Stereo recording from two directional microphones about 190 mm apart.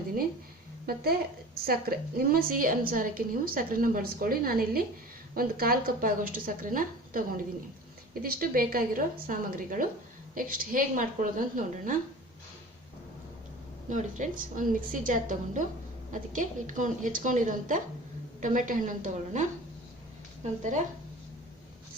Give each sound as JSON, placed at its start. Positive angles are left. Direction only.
{"t": 1.6, "sound": "a woman's voice", "side_deg": -50}
{"t": 13.9, "sound": "a woman's voice", "side_deg": -40}